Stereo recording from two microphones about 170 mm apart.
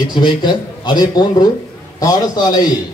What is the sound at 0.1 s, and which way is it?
Speech, 25° left (ahead or behind).